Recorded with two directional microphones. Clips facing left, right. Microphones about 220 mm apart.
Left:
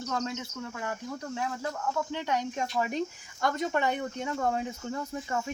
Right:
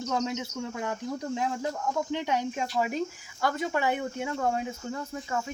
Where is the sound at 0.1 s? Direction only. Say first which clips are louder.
Right 4 dB; 15° right (ahead or behind); by 5.3 s 5° left (ahead or behind).